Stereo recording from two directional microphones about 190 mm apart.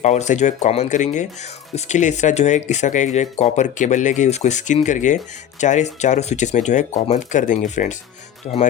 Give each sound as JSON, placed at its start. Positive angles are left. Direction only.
{"t": 0.0, "sound": "speech", "side_deg": 40}